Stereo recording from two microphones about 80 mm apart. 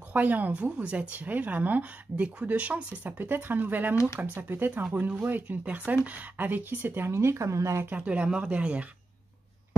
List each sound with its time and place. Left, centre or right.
0.1 s speech: right
7.8 s speech: centre